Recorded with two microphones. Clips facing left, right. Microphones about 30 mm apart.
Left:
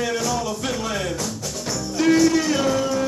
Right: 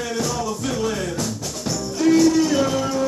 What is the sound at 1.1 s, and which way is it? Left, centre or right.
Music, centre.